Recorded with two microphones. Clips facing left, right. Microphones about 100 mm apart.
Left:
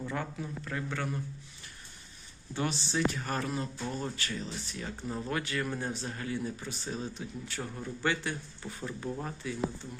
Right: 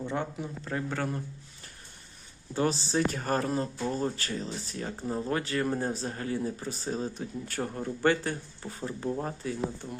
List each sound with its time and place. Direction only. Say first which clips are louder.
0.0 s speech: right 3 dB; 25° right (ahead or behind)
0.7 s speech: right 4 dB; 35° right (ahead or behind)
2.5 s speech: right 5 dB; 35° right (ahead or behind)